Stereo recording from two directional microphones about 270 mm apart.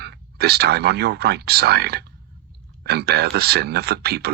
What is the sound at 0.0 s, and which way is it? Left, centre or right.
Speech, right.